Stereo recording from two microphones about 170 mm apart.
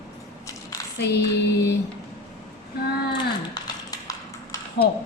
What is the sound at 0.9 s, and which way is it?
Female singing, 85° left.